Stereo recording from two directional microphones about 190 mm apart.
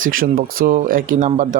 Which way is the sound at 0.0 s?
50° right (ahead or behind).